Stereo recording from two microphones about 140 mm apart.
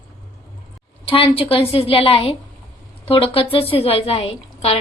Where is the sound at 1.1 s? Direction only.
40° left (ahead or behind).